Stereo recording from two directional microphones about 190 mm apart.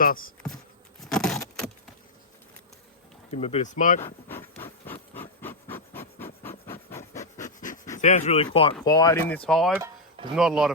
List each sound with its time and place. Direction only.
0.0 s speech: 50° left (ahead or behind)
0.4 s insect: centre (ahead or behind)
3.3 s speech: 35° left (ahead or behind)
4.0 s speech: 10° left (ahead or behind)
4.6 s a sound: 10° left (ahead or behind)
7.3 s a sound: 40° left (ahead or behind)
7.9 s speech: 40° left (ahead or behind)
8.8 s speech: 20° left (ahead or behind)
9.5 s speech: centre (ahead or behind)